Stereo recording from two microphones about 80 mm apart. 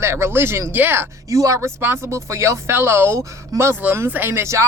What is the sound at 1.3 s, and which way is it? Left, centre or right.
Speech, right.